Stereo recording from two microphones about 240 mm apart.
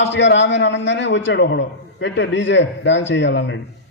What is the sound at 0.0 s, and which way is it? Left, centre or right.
A man's voice, left.